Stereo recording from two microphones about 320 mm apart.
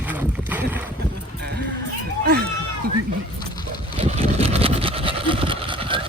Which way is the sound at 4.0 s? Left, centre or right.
Centre.